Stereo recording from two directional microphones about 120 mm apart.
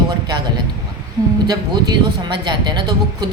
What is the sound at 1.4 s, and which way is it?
Speech, 35° right (ahead or behind).